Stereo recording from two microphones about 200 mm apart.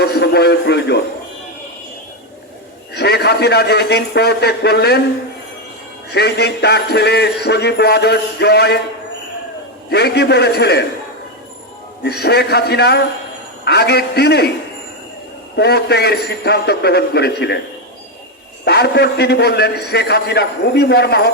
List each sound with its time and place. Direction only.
0.0 s a man's voice: 55° left (ahead or behind)
2.9 s a man's voice: 55° left (ahead or behind)
6.1 s a man's voice: 55° left (ahead or behind)
9.9 s a man's voice: 55° left (ahead or behind)
12.0 s a man's voice: 55° left (ahead or behind)
15.5 s a man's voice: 55° left (ahead or behind)
18.6 s a man's voice: 55° left (ahead or behind)